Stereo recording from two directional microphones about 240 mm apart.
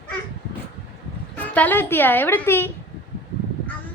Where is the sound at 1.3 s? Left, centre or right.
Centre.